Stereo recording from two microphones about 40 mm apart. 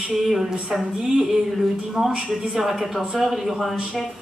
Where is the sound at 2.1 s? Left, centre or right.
Right.